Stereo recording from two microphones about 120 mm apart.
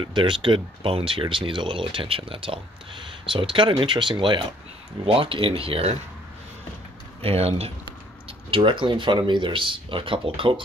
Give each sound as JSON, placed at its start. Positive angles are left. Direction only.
{"t": 0.0, "sound": "speech", "side_deg": -45}
{"t": 7.2, "sound": "speech", "side_deg": -55}